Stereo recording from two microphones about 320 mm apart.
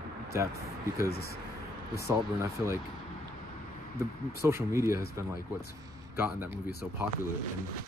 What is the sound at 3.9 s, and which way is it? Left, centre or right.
Speech, centre.